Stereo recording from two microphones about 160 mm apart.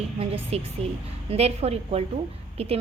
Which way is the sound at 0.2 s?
40° right (ahead or behind).